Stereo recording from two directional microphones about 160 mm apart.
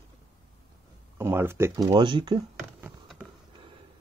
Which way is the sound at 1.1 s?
15° right (ahead or behind).